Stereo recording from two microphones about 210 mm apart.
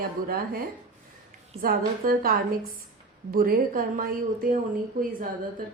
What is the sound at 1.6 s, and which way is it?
Speech, 45° right (ahead or behind).